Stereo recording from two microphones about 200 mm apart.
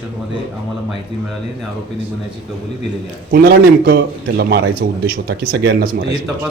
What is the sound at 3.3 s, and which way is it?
A man's voice, 50° right (ahead or behind).